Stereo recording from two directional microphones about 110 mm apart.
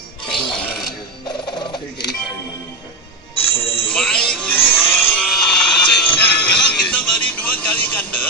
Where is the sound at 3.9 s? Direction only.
10° left (ahead or behind).